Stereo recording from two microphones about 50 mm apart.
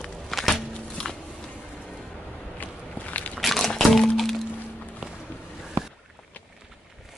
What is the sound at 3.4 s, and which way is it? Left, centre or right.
Crumpling, centre.